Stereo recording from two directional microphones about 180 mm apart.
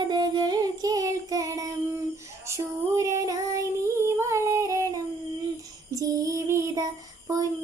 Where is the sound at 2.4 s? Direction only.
15° right (ahead or behind).